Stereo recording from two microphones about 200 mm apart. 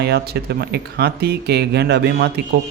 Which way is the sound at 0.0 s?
55° right (ahead or behind).